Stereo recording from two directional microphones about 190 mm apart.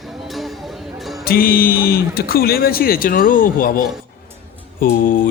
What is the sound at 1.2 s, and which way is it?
Speech, 50° left (ahead or behind).